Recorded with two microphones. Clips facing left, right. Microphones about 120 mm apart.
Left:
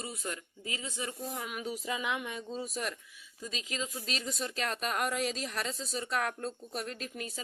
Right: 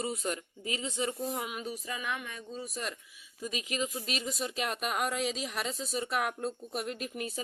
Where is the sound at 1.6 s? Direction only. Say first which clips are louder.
Left 2 dB; 15° left (ahead or behind).